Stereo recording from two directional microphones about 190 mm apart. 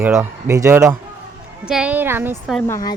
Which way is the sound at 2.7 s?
20° left (ahead or behind).